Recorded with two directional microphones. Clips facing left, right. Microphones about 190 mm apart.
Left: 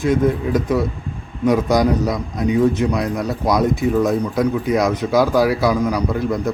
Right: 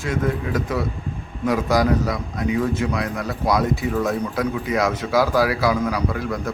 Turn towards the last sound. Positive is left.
turn(degrees=20)  # may be behind; listen again after turning